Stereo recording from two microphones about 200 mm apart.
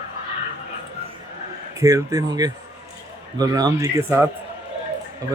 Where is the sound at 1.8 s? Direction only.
15° right (ahead or behind).